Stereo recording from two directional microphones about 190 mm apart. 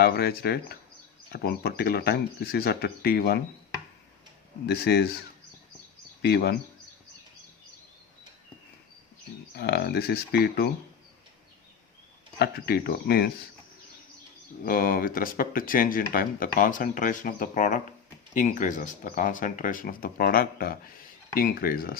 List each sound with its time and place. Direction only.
0.0 s speech: 55° left (ahead or behind)
4.6 s speech: 60° left (ahead or behind)
6.2 s speech: 60° left (ahead or behind)
9.6 s speech: 55° left (ahead or behind)
12.4 s speech: 55° left (ahead or behind)
14.6 s speech: 50° left (ahead or behind)